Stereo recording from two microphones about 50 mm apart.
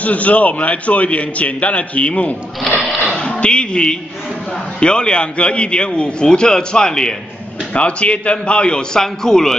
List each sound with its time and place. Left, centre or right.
0.0 s a man's voice: left
3.1 s bow-wow: centre
4.7 s a man's voice: centre
7.7 s a man's voice: left